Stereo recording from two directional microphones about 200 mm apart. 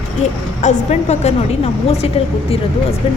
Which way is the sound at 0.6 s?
35° left (ahead or behind).